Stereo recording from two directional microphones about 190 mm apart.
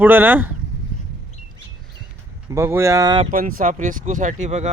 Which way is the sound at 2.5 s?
15° right (ahead or behind).